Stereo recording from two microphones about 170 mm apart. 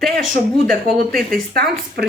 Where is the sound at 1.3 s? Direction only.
60° right (ahead or behind).